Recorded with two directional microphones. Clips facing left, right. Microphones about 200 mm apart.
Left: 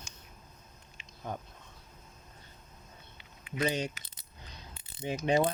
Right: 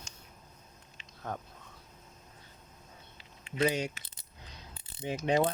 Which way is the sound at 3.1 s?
30° right (ahead or behind).